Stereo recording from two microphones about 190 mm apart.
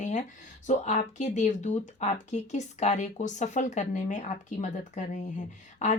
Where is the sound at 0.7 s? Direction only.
40° left (ahead or behind).